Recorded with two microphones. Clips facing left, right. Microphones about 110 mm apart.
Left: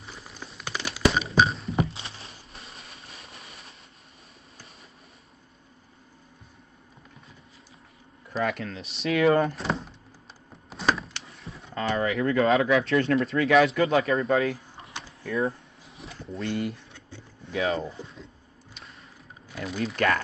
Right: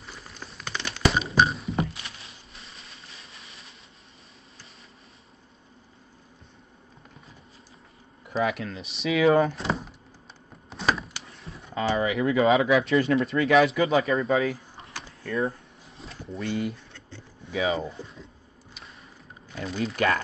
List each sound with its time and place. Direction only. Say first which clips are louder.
0.0 s a sound: even; centre (ahead or behind)
2.0 s a sound: left 2 dB; 30° left (ahead or behind)
8.3 s speech: right 2 dB; 5° right (ahead or behind)
10.7 s door: even; centre (ahead or behind)
11.2 s speech: even; centre (ahead or behind)
19.5 s speech: right 1 dB; centre (ahead or behind)